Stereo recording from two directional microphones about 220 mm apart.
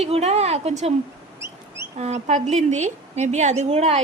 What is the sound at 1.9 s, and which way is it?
A woman's voice, 30° right (ahead or behind).